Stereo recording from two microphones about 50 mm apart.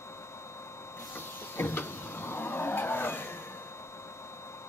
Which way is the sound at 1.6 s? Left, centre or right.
Left.